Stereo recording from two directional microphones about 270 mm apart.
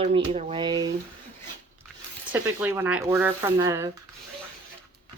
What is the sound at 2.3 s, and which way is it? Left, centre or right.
Speech, centre.